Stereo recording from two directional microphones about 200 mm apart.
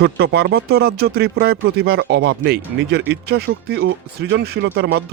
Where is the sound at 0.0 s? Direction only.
50° right (ahead or behind).